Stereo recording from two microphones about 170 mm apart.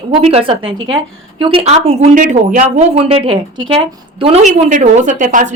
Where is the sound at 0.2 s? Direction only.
35° right (ahead or behind).